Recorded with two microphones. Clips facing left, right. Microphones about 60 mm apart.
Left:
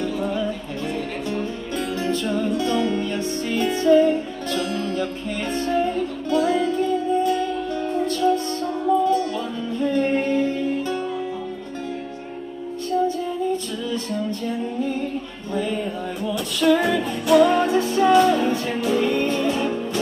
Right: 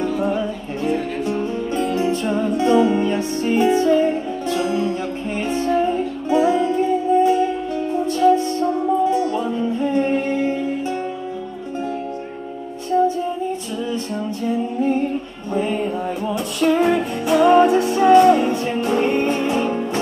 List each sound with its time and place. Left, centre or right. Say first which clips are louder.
0.0 s music: right 3 dB; right
12.9 s music: right 4 dB; right
16.3 s music: left 1 dB; right